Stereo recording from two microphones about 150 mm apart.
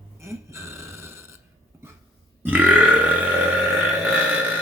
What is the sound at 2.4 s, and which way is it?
Burping, 10° right (ahead or behind).